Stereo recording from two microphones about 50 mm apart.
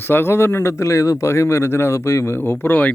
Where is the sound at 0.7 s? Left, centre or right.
Left.